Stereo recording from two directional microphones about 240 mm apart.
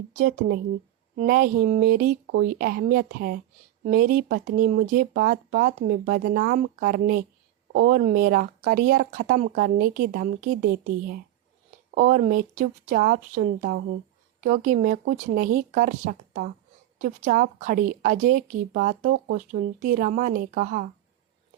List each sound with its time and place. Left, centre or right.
0.1 s speech: right